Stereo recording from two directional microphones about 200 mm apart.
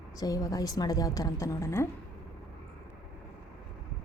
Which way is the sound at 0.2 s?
15° left (ahead or behind).